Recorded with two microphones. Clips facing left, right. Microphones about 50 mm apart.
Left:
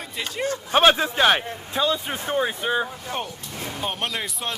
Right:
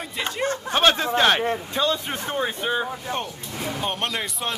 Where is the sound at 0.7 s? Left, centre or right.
Centre.